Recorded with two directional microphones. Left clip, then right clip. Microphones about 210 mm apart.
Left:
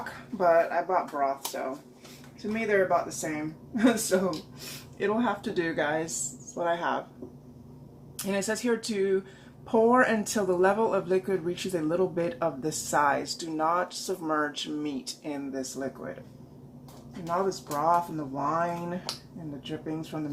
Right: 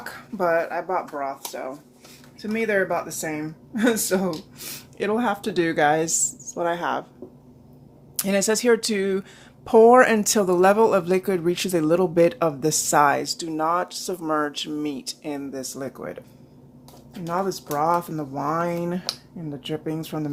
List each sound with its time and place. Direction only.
0.0 s speech: 50° right (ahead or behind)
8.1 s speech: 45° right (ahead or behind)
17.2 s speech: 50° right (ahead or behind)